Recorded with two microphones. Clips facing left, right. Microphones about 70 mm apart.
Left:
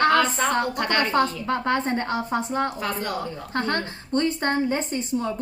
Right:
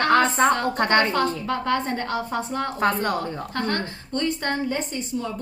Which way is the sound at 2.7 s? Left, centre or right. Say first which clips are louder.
Right 5 dB; right.